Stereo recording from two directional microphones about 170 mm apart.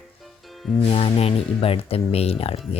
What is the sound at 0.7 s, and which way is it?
Speech, 35° left (ahead or behind).